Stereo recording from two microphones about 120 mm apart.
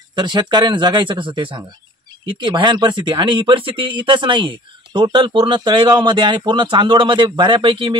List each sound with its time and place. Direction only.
0.1 s speech: 40° right (ahead or behind)